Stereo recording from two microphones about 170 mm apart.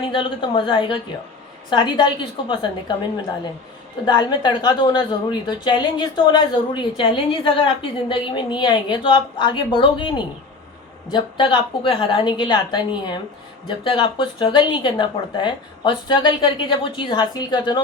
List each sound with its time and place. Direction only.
0.0 s a woman's voice: 30° left (ahead or behind)